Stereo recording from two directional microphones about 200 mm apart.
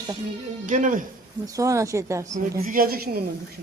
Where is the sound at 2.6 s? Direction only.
45° right (ahead or behind).